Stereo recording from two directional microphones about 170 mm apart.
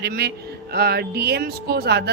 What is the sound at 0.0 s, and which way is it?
A woman's voice, 70° right (ahead or behind).